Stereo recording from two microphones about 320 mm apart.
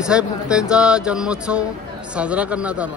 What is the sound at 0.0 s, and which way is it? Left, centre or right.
Speech, centre.